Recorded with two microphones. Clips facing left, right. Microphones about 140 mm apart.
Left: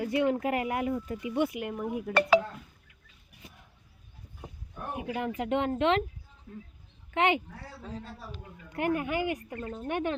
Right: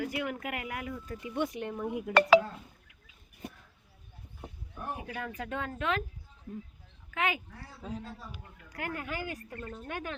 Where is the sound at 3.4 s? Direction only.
60° right (ahead or behind).